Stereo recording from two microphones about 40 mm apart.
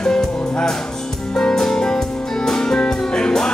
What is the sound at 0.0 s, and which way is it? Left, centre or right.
Music, centre.